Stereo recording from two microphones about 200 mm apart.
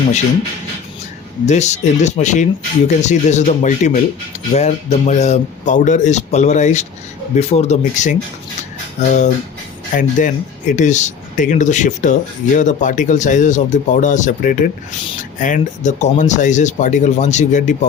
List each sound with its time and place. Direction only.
1.5 s speech: 35° left (ahead or behind)